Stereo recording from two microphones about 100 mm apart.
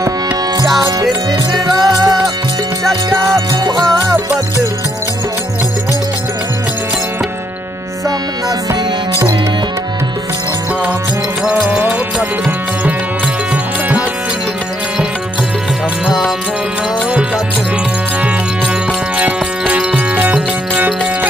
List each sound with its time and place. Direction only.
0.7 s music: 35° right (ahead or behind)
1.7 s music: centre (ahead or behind)
3.7 s music: 5° left (ahead or behind)
11.6 s music: 15° right (ahead or behind)
19.1 s music: 15° right (ahead or behind)